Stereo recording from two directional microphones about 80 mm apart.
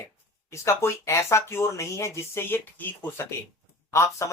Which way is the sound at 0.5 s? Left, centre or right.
Left.